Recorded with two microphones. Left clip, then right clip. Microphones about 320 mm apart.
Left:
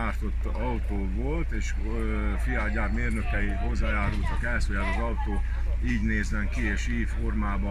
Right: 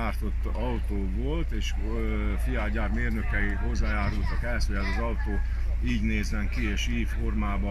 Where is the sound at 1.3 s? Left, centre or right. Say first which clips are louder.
Even; centre.